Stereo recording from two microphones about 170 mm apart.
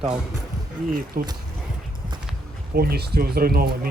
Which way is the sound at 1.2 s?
55° right (ahead or behind).